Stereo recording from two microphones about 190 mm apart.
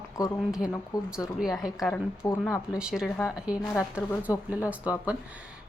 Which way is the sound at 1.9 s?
10° left (ahead or behind).